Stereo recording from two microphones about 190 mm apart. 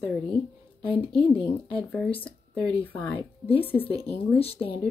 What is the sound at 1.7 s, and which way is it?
Speech, 5° left (ahead or behind).